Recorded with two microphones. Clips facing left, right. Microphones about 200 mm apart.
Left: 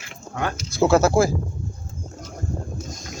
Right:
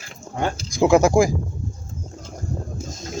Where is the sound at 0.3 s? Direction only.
30° right (ahead or behind).